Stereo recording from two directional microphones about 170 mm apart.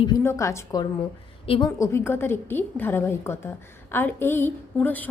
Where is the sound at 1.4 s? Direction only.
35° left (ahead or behind).